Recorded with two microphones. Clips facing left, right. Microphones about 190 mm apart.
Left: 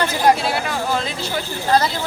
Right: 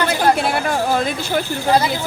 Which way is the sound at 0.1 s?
55° right (ahead or behind).